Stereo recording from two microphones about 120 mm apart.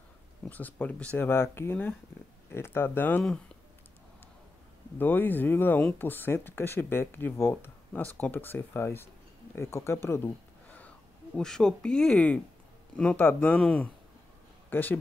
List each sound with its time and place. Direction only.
0.5 s speech: 15° left (ahead or behind)
4.9 s speech: 15° left (ahead or behind)
10.0 s a sound: 20° left (ahead or behind)
11.3 s a man's voice: 5° left (ahead or behind)